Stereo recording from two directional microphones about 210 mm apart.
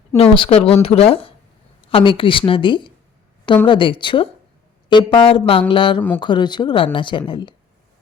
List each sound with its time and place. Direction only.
0.2 s speech: 25° left (ahead or behind)